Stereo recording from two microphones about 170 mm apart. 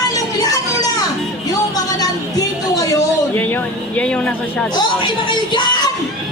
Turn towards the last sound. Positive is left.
turn(degrees=25)  # may be behind; listen again after turning